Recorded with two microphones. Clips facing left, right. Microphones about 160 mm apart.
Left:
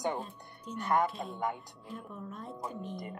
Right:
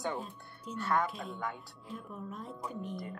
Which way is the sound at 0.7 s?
15° left (ahead or behind).